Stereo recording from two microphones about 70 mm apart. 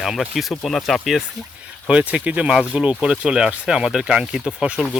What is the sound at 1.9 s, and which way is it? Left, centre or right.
Speech, centre.